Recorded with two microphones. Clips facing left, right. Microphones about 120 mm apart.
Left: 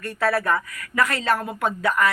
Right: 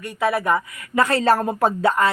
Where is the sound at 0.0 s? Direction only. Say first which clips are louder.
Right 1 dB; 15° right (ahead or behind).